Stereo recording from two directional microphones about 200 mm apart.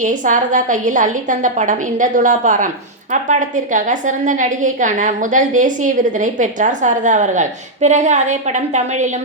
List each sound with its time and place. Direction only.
0.0 s a woman's voice: 40° right (ahead or behind)